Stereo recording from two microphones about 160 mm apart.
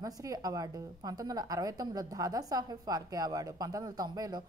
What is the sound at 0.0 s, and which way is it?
A woman's voice, 20° right (ahead or behind).